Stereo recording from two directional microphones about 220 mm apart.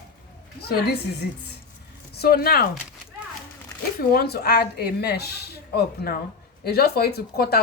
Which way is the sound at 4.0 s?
45° left (ahead or behind).